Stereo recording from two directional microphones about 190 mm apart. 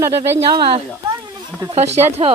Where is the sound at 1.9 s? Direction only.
35° right (ahead or behind).